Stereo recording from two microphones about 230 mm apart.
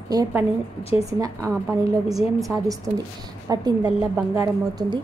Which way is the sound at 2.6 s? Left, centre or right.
Centre.